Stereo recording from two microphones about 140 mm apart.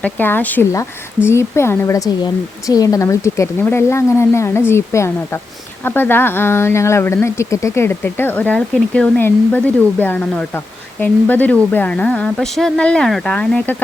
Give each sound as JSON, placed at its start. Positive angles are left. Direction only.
{"t": 0.0, "sound": "speech", "side_deg": 15}